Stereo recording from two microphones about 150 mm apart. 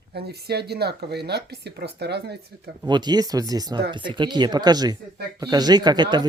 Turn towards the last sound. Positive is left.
turn(degrees=-30)  # may be behind; listen again after turning